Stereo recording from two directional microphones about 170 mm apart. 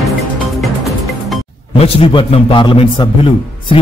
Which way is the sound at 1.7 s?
35° left (ahead or behind).